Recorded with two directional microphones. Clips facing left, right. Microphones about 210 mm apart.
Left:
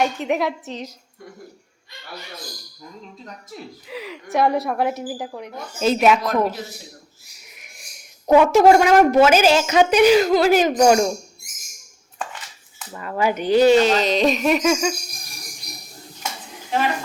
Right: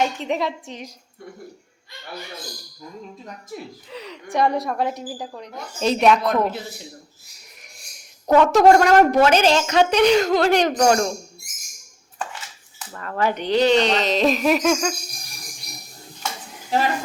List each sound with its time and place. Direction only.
0.0 s a woman's voice: 5° left (ahead or behind)
3.8 s a woman's voice: 5° left (ahead or behind)
8.3 s a woman's voice: 10° left (ahead or behind)
12.9 s a woman's voice: 10° left (ahead or behind)